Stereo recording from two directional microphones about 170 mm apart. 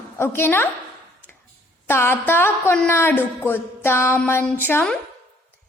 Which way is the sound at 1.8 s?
15° left (ahead or behind).